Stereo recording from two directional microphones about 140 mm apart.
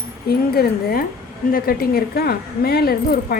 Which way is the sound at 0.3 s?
90° left.